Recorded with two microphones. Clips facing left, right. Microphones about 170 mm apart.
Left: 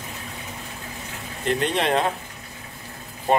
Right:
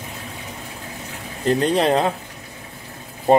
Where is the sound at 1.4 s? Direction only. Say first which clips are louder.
Right 5 dB; 35° right (ahead or behind).